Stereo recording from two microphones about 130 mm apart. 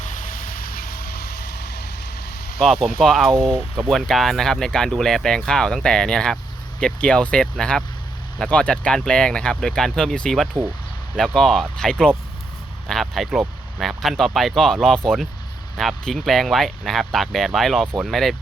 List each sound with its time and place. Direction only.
0.0 s vehicle: 75° left (ahead or behind); by 0.9 s 90° left
2.6 s speech: centre (ahead or behind)